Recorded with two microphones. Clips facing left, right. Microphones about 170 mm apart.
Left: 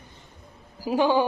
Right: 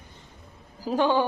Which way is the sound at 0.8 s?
10° left (ahead or behind).